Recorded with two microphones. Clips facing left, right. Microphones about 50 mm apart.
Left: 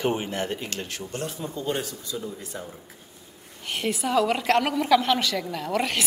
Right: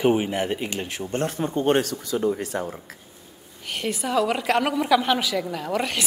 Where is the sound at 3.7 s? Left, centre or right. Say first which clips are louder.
Even; centre.